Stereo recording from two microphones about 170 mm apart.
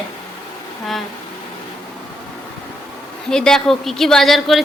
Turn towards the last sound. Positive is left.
turn(degrees=0)  # may be behind; listen again after turning